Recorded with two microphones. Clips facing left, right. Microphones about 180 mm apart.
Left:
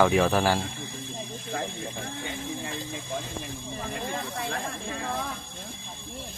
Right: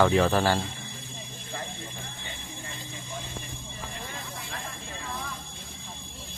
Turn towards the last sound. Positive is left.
turn(degrees=60)  # may be behind; listen again after turning